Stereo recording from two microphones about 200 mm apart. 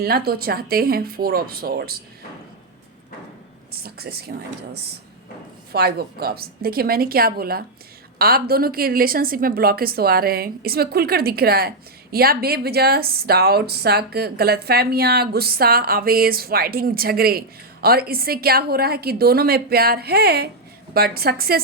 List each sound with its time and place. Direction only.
0.0 s a woman's voice: 50° right (ahead or behind)
3.7 s a woman's voice: 50° right (ahead or behind)